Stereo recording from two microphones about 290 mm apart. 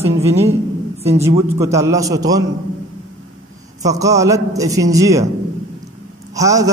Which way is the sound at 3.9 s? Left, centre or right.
Centre.